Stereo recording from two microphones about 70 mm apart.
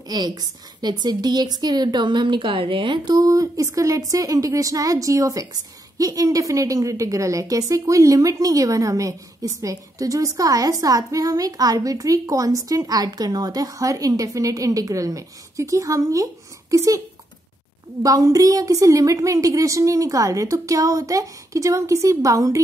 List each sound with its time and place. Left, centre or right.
0.1 s a woman's voice: right
3.3 s a woman's voice: right
18.0 s a woman's voice: right